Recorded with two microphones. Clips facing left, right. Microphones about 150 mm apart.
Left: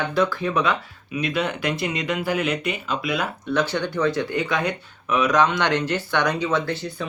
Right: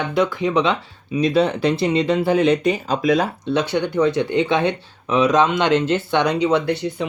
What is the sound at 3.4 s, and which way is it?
Speech, 25° right (ahead or behind).